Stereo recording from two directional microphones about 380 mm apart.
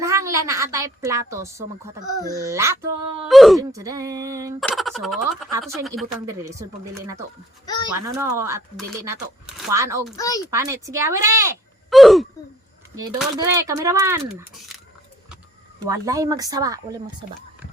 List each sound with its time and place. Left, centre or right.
0.0 s a woman's voice: centre
10.2 s speech: centre
10.5 s speech: centre
15.8 s speech: centre